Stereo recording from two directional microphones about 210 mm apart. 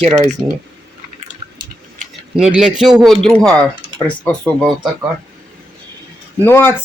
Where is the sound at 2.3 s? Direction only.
5° right (ahead or behind).